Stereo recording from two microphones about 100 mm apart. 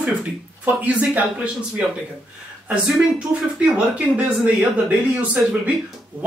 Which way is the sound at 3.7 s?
10° right (ahead or behind).